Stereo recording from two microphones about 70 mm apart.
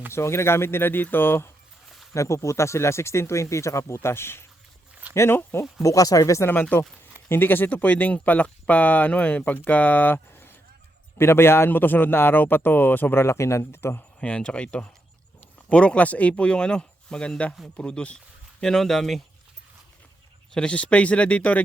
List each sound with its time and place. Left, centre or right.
0.1 s a man's voice: left
2.1 s a man's voice: left
5.8 s speech: left
6.5 s a man's voice: left
14.2 s speech: centre
18.6 s speech: centre
20.5 s speech: centre